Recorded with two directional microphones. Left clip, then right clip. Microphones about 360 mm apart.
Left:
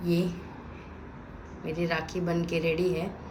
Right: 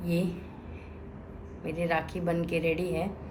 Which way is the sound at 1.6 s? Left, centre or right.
Centre.